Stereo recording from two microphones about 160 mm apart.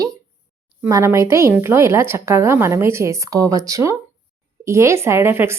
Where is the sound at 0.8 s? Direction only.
20° right (ahead or behind).